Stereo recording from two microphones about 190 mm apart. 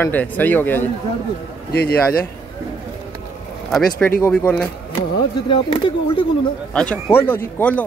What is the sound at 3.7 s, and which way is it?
Speech, 5° left (ahead or behind).